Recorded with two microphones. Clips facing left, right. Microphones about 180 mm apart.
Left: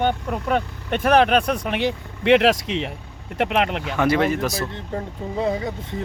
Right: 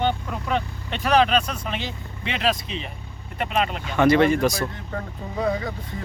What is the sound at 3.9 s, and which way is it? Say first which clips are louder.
Speech: right 3 dB; 5° left (ahead or behind).